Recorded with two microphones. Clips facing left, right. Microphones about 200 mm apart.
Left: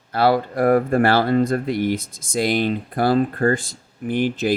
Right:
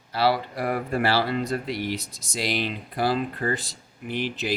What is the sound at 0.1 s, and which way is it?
Speech, 50° left (ahead or behind).